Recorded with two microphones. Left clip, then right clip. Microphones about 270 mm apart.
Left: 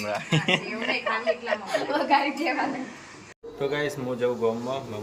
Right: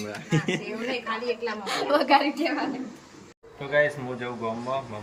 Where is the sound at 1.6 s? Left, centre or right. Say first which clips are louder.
Right 5 dB; centre.